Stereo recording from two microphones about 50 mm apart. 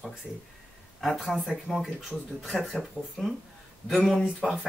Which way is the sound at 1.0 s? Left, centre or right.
Centre.